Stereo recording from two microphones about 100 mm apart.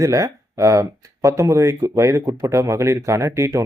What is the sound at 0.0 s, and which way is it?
Speech, 30° right (ahead or behind).